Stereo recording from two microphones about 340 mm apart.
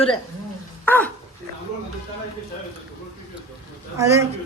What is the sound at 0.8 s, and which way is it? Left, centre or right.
Dog, centre.